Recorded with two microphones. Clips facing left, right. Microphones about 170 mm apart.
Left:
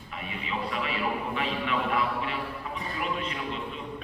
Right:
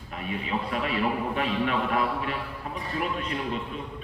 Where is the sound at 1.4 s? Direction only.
45° right (ahead or behind).